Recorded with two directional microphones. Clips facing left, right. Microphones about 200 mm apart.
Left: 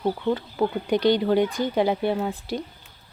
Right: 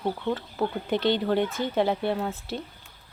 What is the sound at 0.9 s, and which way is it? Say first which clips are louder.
Speech: left 4 dB; 25° right (ahead or behind).